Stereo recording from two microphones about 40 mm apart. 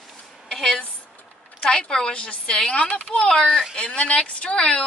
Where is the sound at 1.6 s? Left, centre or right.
Left.